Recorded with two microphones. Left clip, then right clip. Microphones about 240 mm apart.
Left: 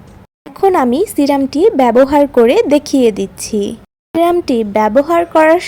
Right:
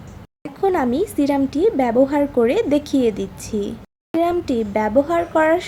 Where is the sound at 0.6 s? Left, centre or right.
Left.